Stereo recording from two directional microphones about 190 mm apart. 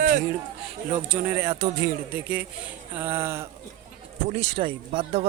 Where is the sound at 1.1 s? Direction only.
10° right (ahead or behind).